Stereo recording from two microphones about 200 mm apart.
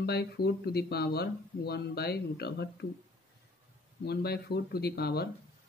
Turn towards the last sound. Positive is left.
turn(degrees=50)  # may be behind; listen again after turning